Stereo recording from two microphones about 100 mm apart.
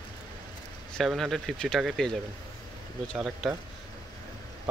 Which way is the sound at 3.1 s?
Centre (ahead or behind).